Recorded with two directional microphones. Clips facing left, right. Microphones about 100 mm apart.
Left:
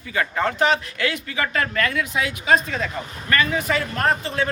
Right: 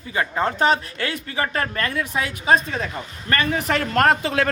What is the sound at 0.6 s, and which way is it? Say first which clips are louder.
A man's voice: right 1 dB; 35° right (ahead or behind).